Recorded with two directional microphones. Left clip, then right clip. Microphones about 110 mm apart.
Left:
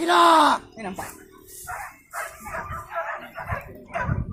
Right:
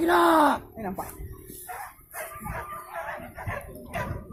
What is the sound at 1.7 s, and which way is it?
Bow-wow, 45° left (ahead or behind).